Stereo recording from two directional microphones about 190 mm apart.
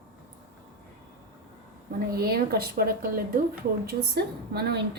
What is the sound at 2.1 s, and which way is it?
A woman's voice, 55° right (ahead or behind).